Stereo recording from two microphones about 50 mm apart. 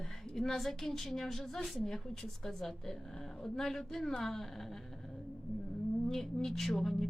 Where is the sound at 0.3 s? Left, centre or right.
Centre.